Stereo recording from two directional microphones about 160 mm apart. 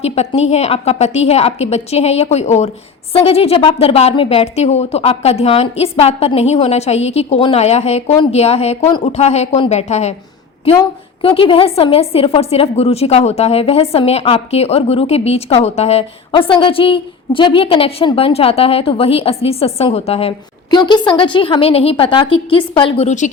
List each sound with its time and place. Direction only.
0.0 s a woman's voice: 40° left (ahead or behind)
11.2 s a woman's voice: 35° left (ahead or behind)
23.0 s a woman's voice: 50° left (ahead or behind)